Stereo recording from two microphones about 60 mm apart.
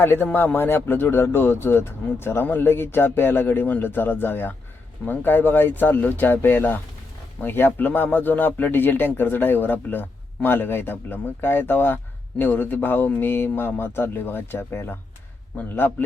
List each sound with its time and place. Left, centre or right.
0.0 s speech: left